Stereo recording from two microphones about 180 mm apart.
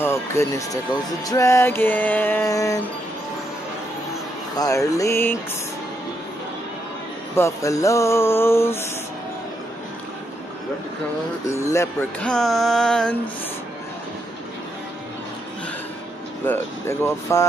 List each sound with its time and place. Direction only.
0.0 s speech: 15° left (ahead or behind)
1.2 s music: 20° left (ahead or behind)
4.6 s music: 20° left (ahead or behind)
7.3 s music: 15° left (ahead or behind)
11.4 s speech: 15° left (ahead or behind)
16.4 s music: 15° left (ahead or behind)